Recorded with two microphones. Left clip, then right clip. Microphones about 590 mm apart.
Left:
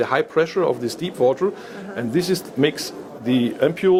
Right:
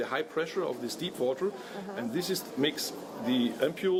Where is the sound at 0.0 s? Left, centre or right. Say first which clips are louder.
Left 13 dB; left.